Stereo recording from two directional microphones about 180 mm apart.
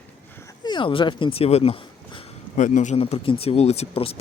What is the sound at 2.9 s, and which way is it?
A man's voice, 30° left (ahead or behind).